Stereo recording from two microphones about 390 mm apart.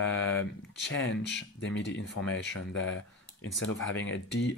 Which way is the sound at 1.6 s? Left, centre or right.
Left.